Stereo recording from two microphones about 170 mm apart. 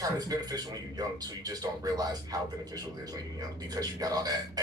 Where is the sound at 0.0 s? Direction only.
20° right (ahead or behind).